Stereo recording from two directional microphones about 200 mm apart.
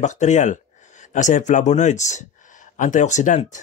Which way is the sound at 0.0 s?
35° left (ahead or behind).